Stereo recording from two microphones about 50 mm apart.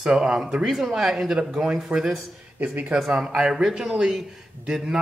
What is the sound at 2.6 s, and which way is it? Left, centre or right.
Speech, right.